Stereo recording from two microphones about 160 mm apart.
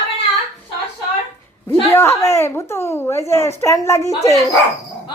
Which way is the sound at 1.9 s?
15° left (ahead or behind).